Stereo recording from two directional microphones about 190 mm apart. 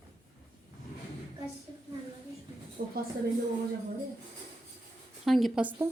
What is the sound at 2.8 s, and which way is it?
Speech, 45° right (ahead or behind).